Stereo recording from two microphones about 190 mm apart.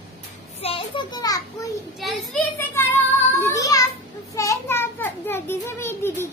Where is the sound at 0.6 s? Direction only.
25° left (ahead or behind).